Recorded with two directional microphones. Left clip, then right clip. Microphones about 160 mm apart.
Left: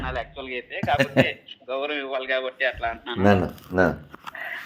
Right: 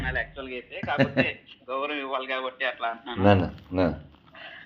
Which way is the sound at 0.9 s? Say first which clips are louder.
Left 3 dB; 55° left (ahead or behind).